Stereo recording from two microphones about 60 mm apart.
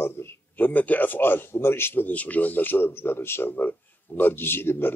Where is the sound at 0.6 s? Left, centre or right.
Left.